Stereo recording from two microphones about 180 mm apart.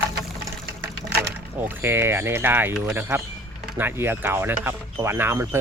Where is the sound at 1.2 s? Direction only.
10° right (ahead or behind).